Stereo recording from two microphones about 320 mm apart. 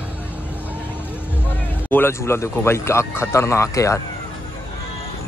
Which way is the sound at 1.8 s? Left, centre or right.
Centre.